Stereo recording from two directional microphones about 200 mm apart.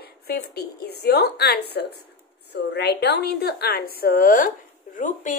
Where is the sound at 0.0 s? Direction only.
50° left (ahead or behind).